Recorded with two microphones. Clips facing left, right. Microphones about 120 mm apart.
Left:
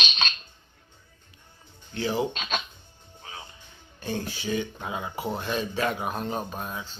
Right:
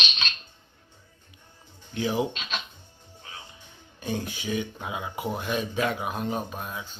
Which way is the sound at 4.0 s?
15° right (ahead or behind).